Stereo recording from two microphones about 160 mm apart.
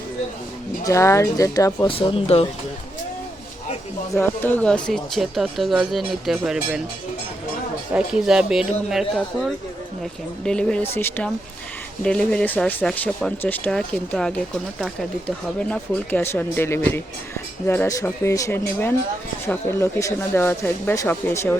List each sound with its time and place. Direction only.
0.9 s speech: 20° left (ahead or behind)
1.9 s speech: 35° left (ahead or behind)
4.2 s speech: 10° left (ahead or behind); by 6.8 s 5° right (ahead or behind)
7.9 s speech: 5° right (ahead or behind); by 21.5 s 15° left (ahead or behind)